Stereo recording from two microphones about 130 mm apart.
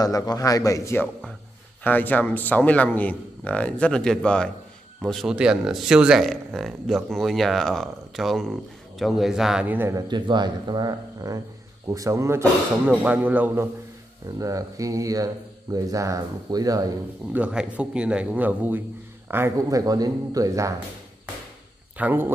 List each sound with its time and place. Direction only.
0.0 s a man's voice: 30° left (ahead or behind); by 9.9 s 15° right (ahead or behind)
9.9 s speech: 35° right (ahead or behind); by 13.7 s 10° right (ahead or behind)
14.4 s speech: 25° right (ahead or behind)
17.3 s speech: 10° right (ahead or behind)
19.8 s speech: 30° right (ahead or behind)
21.9 s speech: 15° right (ahead or behind)